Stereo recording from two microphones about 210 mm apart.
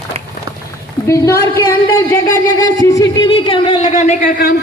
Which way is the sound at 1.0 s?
15° left (ahead or behind).